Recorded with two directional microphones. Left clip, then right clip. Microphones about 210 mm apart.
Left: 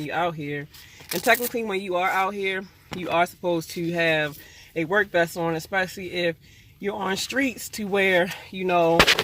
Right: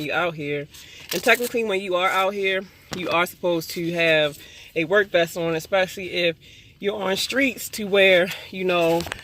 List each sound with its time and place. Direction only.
0.0 s speech: 5° right (ahead or behind)